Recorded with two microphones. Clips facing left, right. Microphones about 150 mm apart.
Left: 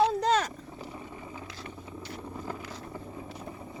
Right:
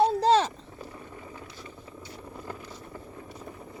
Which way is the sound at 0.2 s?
30° right (ahead or behind).